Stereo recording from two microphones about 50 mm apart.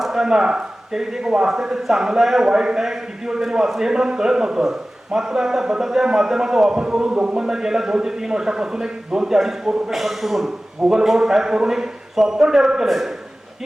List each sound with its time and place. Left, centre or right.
0.0 s speech: centre